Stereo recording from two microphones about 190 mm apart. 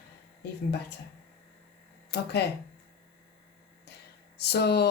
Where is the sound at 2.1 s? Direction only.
60° left (ahead or behind).